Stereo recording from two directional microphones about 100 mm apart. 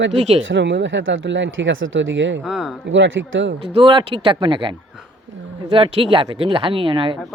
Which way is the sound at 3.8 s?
55° right (ahead or behind).